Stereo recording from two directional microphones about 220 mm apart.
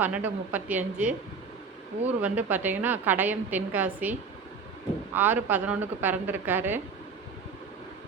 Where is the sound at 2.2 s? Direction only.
5° right (ahead or behind).